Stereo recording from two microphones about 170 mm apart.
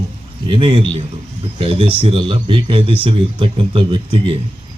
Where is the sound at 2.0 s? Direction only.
30° right (ahead or behind).